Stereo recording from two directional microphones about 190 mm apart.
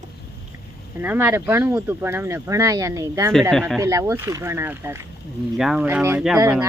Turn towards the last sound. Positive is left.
turn(degrees=-10)  # may be behind; listen again after turning